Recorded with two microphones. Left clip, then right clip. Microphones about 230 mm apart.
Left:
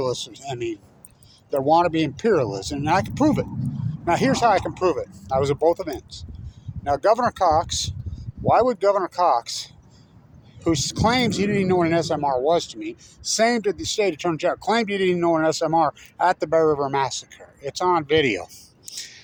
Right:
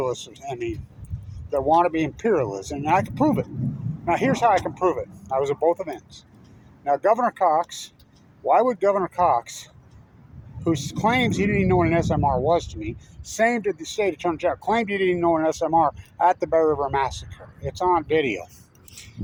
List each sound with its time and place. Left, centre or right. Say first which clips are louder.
0.0 s speech: left 1 dB; centre